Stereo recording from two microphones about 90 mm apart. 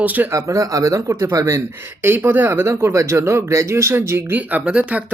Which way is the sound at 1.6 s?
25° right (ahead or behind).